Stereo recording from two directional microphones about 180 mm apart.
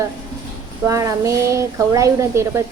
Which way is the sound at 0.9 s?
15° right (ahead or behind).